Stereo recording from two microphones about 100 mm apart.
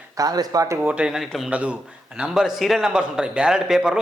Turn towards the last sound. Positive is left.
turn(degrees=-5)  # may be behind; listen again after turning